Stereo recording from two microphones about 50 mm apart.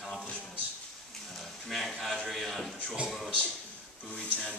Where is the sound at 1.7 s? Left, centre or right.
Centre.